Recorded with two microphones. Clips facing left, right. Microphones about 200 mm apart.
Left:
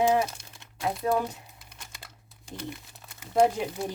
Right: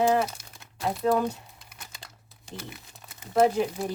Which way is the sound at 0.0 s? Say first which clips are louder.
Right 1 dB; 10° left (ahead or behind).